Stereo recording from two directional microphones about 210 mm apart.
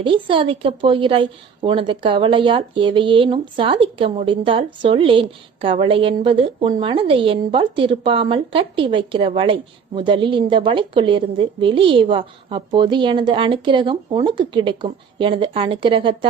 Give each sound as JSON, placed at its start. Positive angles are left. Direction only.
{"t": 0.0, "sound": "a woman's voice", "side_deg": -25}